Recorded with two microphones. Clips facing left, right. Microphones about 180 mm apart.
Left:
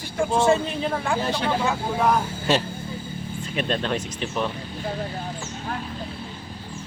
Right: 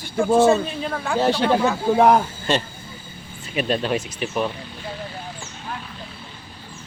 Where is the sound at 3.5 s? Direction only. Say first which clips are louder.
Right 3 dB; 5° right (ahead or behind).